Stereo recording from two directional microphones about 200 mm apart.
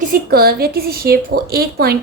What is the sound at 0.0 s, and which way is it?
A woman's voice, 45° right (ahead or behind).